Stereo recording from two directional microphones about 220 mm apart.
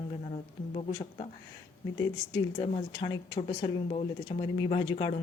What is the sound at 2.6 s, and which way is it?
Speech, 20° left (ahead or behind).